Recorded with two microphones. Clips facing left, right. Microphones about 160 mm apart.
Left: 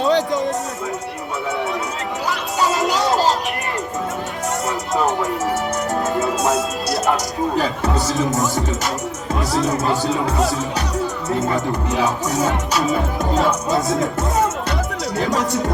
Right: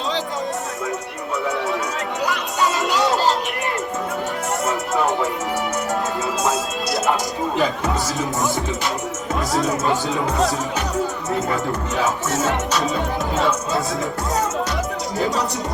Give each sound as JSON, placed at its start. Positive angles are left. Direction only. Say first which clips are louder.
{"t": 0.0, "sound": "music", "louder": "left 7 dB", "side_deg": 60}
{"t": 2.6, "sound": "a sound", "louder": "left 1 dB", "side_deg": 40}
{"t": 7.5, "sound": "speech", "louder": "right 1 dB", "side_deg": 40}
{"t": 9.5, "sound": "speech", "louder": "left 1 dB", "side_deg": 0}
{"t": 9.8, "sound": "speech", "louder": "left 2 dB", "side_deg": 40}
{"t": 12.3, "sound": "music", "louder": "left 1 dB", "side_deg": 15}
{"t": 13.7, "sound": "speech", "louder": "left 4 dB", "side_deg": 20}